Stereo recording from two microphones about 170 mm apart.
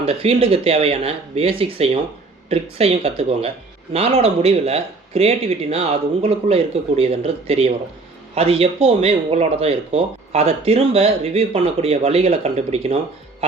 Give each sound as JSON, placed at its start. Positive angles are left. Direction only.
{"t": 0.0, "sound": "speech", "side_deg": -35}